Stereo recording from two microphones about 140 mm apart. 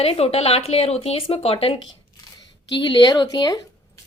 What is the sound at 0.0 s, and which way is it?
Speech, 45° left (ahead or behind).